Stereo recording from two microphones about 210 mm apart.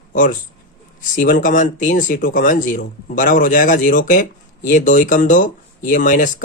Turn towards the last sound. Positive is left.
turn(degrees=40)  # may be behind; listen again after turning